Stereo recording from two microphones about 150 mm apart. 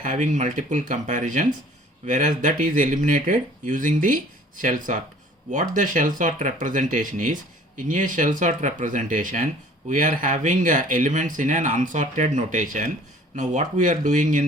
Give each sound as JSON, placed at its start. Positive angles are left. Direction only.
{"t": 0.0, "sound": "speech", "side_deg": -55}